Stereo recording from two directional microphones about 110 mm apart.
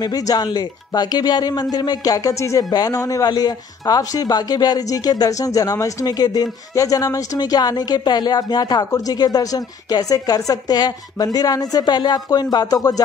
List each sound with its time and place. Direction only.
0.0 s speech: 35° left (ahead or behind)